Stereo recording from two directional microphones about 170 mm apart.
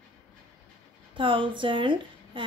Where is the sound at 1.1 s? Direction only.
30° right (ahead or behind).